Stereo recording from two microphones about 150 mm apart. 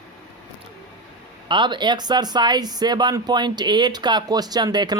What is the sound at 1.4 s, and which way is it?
Speech, 30° right (ahead or behind).